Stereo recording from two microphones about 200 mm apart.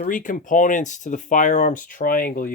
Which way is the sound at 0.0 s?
40° left (ahead or behind).